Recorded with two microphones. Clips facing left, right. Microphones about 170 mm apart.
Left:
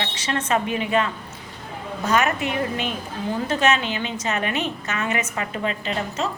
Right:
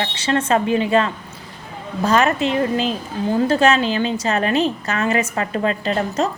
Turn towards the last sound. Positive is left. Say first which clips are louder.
# right 6 dB
turn(degrees=-40)  # may be behind; listen again after turning